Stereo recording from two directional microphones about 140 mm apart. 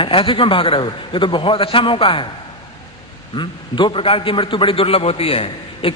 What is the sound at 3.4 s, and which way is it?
A man's voice, 35° left (ahead or behind).